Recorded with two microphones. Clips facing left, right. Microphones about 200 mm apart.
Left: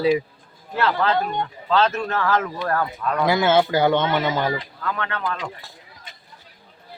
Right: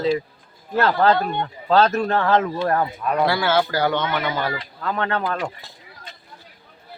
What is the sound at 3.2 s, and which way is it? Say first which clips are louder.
Speech: left 5 dB; 20° left (ahead or behind).